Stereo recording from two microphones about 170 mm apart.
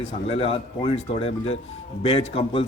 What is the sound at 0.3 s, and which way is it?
Speech, 35° left (ahead or behind).